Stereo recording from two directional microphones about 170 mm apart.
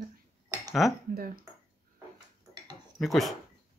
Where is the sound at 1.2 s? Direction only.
55° right (ahead or behind).